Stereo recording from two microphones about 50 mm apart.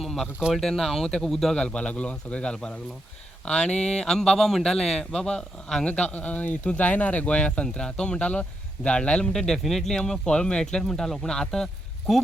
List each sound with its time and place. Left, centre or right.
0.0 s a sound: centre
0.5 s speech: centre
1.6 s speech: left
5.8 s speech: left
9.3 s speech: centre
10.0 s speech: centre